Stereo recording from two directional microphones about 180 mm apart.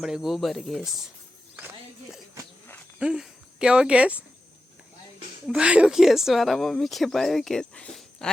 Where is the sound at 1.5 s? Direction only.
10° right (ahead or behind).